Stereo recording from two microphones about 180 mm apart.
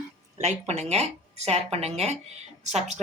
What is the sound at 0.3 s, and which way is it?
A woman's voice, 40° right (ahead or behind).